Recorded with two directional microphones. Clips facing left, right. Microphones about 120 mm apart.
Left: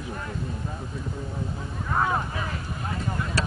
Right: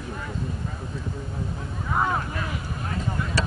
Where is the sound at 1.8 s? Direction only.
Centre (ahead or behind).